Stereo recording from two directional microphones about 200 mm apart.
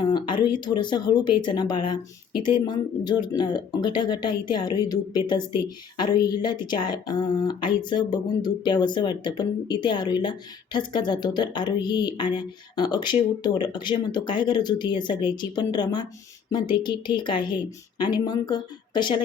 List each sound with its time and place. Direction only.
0.0 s speech: 20° left (ahead or behind)
6.7 s speech: 20° left (ahead or behind)